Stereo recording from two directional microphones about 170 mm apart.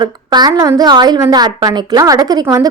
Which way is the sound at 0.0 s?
25° right (ahead or behind).